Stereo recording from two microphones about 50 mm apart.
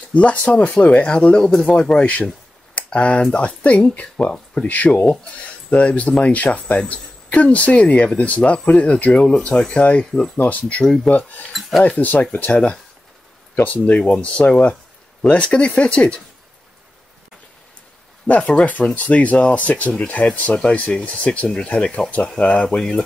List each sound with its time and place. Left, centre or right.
0.1 s speech: left; by 2.0 s centre
2.0 s speech: left
4.6 s speech: left
18.2 s speech: left
22.8 s speech: centre